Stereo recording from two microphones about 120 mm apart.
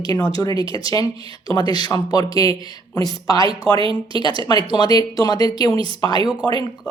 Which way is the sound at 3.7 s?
45° right (ahead or behind).